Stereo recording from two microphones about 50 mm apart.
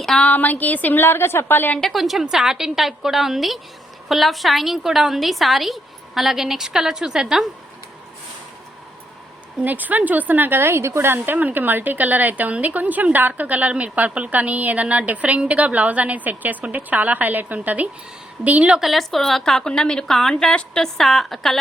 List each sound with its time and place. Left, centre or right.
0.2 s a woman's voice: left
1.8 s a woman's voice: centre
9.6 s a woman's voice: right
10.6 s a woman's voice: right
11.3 s a woman's voice: right
18.8 s a woman's voice: centre
21.0 s a woman's voice: centre